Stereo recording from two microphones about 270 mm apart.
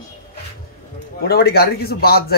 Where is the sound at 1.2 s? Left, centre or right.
Left.